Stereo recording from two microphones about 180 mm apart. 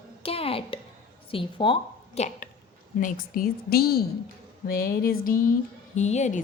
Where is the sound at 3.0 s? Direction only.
50° left (ahead or behind).